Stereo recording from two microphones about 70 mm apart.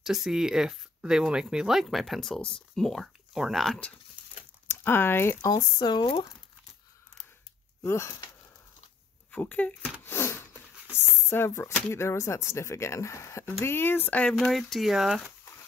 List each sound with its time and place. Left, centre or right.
0.0 s speech: centre
4.6 s speech: left
5.5 s speech: left
7.8 s a sound: left
9.3 s speech: left
10.0 s a sound: left
11.2 s speech: left
14.3 s speech: centre